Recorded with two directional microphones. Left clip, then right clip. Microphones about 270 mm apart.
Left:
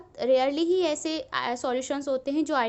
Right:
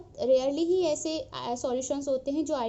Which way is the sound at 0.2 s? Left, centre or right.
Centre.